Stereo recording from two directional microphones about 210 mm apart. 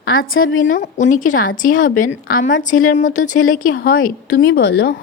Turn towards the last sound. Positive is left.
turn(degrees=50)  # may be behind; listen again after turning